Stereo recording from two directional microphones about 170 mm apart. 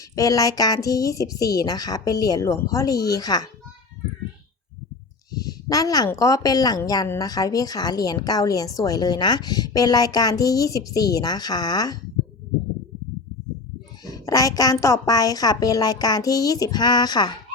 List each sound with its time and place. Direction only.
0.2 s a woman's voice: 20° left (ahead or behind)
5.3 s a woman's voice: 20° left (ahead or behind)
14.0 s a woman's voice: 20° left (ahead or behind)